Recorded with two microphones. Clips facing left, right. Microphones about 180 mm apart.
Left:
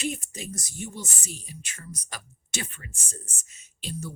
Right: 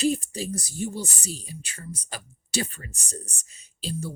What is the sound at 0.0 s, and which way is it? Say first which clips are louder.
Speech: right 8 dB; 35° right (ahead or behind).